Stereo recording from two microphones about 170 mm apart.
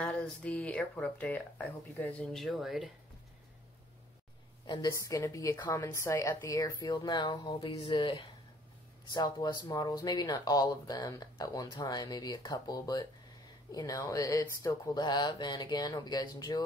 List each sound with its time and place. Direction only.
0.0 s speech: 5° left (ahead or behind)
5.0 s speech: 20° left (ahead or behind)